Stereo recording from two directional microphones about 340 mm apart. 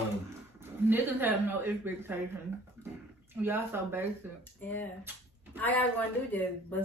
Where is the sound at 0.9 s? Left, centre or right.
Centre.